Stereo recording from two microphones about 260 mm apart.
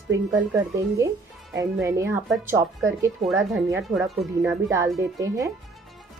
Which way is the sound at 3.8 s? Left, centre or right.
Centre.